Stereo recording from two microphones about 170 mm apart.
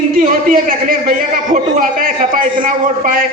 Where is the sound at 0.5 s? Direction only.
55° right (ahead or behind).